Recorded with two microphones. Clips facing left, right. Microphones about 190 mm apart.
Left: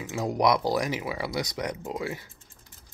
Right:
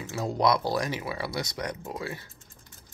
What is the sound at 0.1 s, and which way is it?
Speech, 15° left (ahead or behind).